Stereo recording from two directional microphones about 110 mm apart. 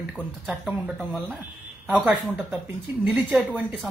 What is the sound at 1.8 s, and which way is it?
Speech, 15° right (ahead or behind).